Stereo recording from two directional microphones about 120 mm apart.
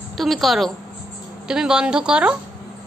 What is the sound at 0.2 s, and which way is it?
A woman's voice, centre (ahead or behind).